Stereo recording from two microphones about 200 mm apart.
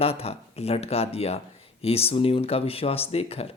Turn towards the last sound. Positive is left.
turn(degrees=30)  # may be behind; listen again after turning